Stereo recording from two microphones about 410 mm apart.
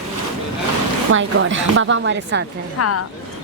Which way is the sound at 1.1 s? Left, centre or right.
Right.